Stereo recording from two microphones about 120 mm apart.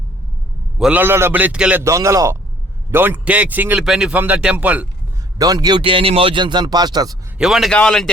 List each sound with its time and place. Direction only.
0.8 s a man's voice: 10° right (ahead or behind)
1.8 s a man's voice: 25° right (ahead or behind)
5.4 s a man's voice: 35° right (ahead or behind)
7.3 s speech: 5° right (ahead or behind)
7.7 s speech: 10° left (ahead or behind)